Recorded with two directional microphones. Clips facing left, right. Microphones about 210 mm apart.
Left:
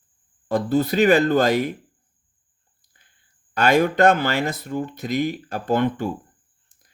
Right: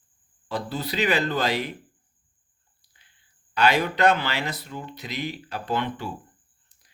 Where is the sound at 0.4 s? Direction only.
50° left (ahead or behind).